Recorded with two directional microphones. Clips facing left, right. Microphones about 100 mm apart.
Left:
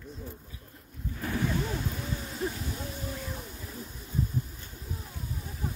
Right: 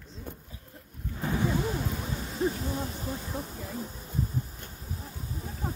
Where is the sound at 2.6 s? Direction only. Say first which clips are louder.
Right 4 dB; 35° right (ahead or behind).